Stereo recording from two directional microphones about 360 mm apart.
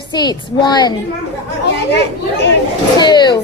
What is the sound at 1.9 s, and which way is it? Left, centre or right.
Speech, left.